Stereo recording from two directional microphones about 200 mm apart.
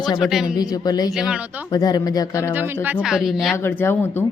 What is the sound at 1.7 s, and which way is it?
Speech, 20° left (ahead or behind).